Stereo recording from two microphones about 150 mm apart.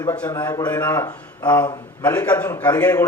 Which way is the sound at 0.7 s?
10° left (ahead or behind).